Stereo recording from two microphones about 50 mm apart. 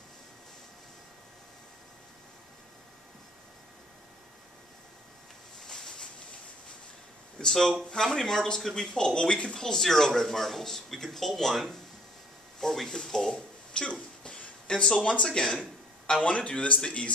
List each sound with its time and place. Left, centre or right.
5.7 s a sound: centre
7.3 s speech: centre
16.3 s speech: left